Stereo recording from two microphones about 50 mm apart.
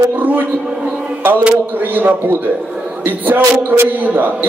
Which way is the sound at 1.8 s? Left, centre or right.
Right.